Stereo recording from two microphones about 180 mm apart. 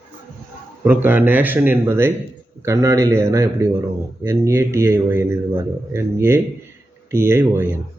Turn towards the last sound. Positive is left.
turn(degrees=-15)  # may be behind; listen again after turning